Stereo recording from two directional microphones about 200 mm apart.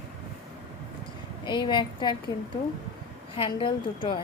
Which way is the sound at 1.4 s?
20° left (ahead or behind).